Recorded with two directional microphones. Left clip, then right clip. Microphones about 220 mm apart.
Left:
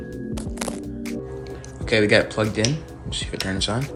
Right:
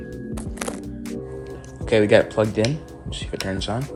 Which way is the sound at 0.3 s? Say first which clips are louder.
Even; centre (ahead or behind).